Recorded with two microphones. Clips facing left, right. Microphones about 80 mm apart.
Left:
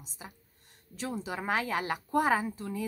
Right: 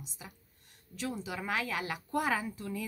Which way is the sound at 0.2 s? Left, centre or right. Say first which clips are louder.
Left 3 dB; left.